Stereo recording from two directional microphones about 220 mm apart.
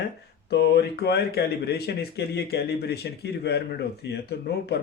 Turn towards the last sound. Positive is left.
turn(degrees=50)  # may be behind; listen again after turning